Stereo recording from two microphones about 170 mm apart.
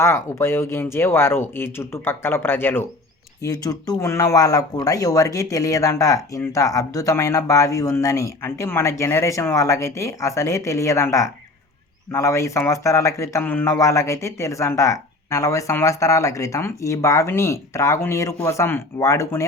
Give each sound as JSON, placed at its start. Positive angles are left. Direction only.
{"t": 0.0, "sound": "speech", "side_deg": 15}